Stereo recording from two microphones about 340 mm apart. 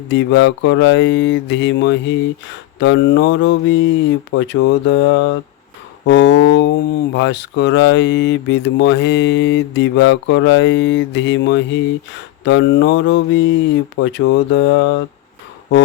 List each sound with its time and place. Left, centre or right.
0.1 s speech: left